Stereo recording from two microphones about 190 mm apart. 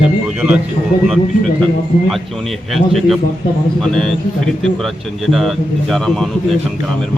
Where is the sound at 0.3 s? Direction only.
5° right (ahead or behind).